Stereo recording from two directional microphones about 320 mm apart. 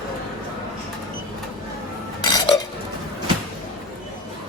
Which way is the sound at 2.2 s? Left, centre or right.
Centre.